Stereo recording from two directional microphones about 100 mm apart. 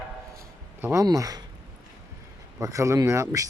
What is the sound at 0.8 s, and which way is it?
Speech, 35° right (ahead or behind).